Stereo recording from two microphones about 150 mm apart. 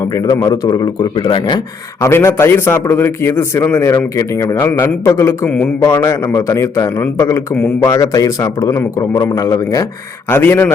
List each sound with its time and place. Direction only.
0.3 s a man's voice: 25° left (ahead or behind)
2.0 s a man's voice: 20° left (ahead or behind)